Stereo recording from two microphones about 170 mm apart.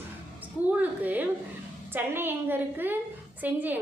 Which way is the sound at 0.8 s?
10° right (ahead or behind).